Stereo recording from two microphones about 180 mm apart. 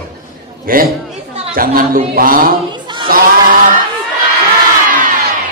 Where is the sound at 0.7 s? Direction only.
50° right (ahead or behind).